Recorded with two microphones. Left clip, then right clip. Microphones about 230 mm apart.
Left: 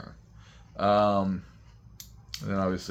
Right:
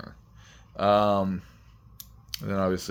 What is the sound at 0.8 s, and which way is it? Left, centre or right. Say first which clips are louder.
Speech: right 1 dB; right.